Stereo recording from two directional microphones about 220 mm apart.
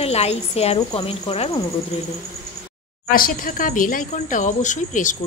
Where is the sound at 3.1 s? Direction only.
40° left (ahead or behind).